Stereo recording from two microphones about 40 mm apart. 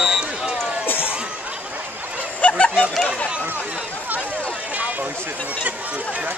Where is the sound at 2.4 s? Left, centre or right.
Left.